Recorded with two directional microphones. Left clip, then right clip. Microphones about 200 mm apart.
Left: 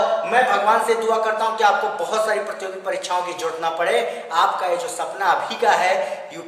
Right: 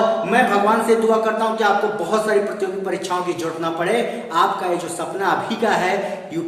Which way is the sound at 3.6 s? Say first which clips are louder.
Even; 15° left (ahead or behind).